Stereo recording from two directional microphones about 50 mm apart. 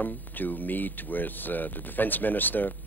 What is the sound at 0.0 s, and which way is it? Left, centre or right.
Speech, left.